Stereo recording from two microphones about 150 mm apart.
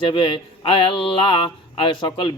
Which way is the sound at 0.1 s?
35° left (ahead or behind).